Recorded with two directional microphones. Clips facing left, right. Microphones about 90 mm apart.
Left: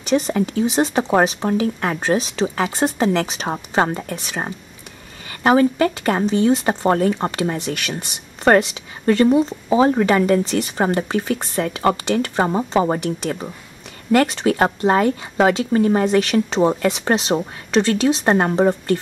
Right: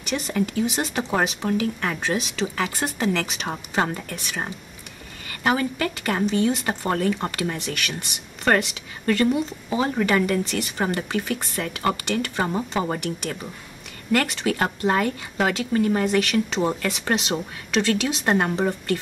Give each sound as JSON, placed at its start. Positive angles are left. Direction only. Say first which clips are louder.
{"t": 0.0, "sound": "speech", "louder": "left 7 dB", "side_deg": 30}